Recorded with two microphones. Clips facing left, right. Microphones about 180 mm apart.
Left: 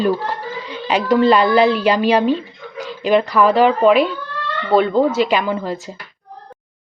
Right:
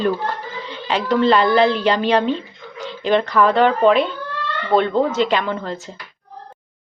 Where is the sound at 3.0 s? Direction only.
15° left (ahead or behind).